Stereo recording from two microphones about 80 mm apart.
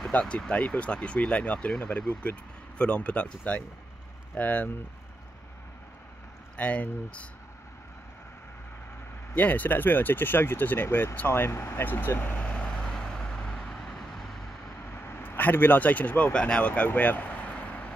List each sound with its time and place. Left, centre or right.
0.1 s speech: centre
6.5 s speech: centre
9.3 s speech: left
12.4 s vehicle: centre
15.0 s a sound: left
15.2 s speech: left